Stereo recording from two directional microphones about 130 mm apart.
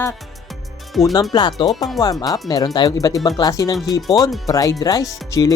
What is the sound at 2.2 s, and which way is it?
Speech, 30° left (ahead or behind).